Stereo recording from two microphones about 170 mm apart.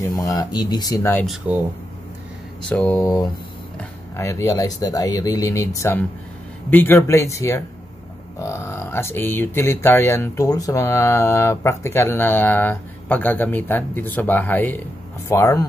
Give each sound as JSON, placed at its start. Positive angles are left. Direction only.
{"t": 0.0, "sound": "speech", "side_deg": 20}
{"t": 1.2, "sound": "speech", "side_deg": 0}
{"t": 2.7, "sound": "speech", "side_deg": 10}